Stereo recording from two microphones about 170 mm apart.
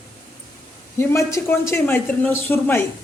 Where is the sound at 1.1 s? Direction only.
15° left (ahead or behind).